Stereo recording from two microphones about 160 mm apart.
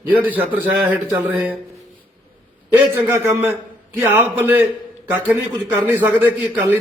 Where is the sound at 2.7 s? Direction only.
10° right (ahead or behind).